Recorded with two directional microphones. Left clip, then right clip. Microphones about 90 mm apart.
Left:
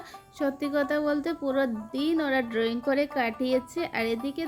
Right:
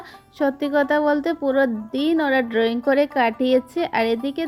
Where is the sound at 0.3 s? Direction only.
30° right (ahead or behind).